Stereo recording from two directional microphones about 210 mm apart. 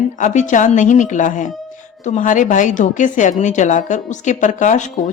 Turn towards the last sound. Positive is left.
turn(degrees=35)  # may be behind; listen again after turning